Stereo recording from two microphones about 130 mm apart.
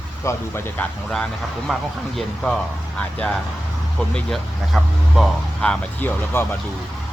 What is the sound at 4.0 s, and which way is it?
Speech, centre (ahead or behind).